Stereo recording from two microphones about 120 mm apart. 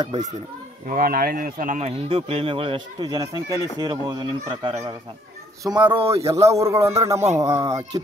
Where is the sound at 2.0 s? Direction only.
50° right (ahead or behind).